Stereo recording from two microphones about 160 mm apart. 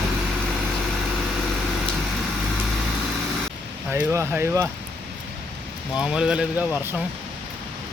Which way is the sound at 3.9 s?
15° right (ahead or behind).